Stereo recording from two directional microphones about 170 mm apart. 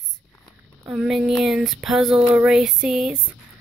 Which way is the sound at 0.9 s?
5° right (ahead or behind).